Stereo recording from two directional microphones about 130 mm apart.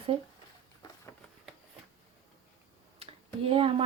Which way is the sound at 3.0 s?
45° right (ahead or behind).